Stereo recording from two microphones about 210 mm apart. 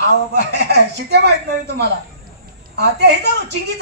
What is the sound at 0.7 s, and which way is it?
Speech, 55° right (ahead or behind).